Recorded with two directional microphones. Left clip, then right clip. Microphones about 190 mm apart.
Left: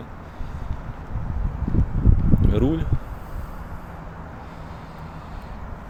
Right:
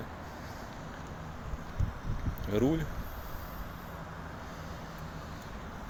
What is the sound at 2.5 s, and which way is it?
Speech, 10° left (ahead or behind).